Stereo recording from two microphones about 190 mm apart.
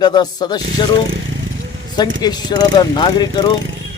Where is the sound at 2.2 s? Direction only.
20° left (ahead or behind).